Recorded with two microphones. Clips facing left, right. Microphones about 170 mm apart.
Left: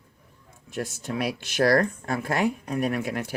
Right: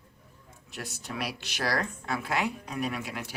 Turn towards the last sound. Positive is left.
turn(degrees=50)  # may be behind; listen again after turning